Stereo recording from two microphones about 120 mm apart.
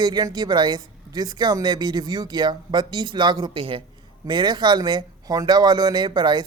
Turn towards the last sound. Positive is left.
turn(degrees=-40)  # may be behind; listen again after turning